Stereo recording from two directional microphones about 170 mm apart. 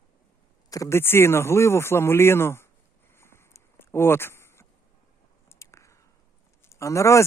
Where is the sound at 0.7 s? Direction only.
15° left (ahead or behind).